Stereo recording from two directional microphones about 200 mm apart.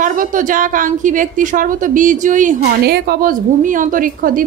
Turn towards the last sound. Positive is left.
turn(degrees=-45)  # may be behind; listen again after turning